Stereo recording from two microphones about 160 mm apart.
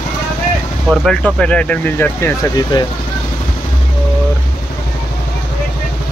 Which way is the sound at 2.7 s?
30° left (ahead or behind).